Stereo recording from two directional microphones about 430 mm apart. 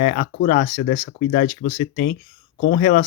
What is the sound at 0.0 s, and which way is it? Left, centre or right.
Speech, centre.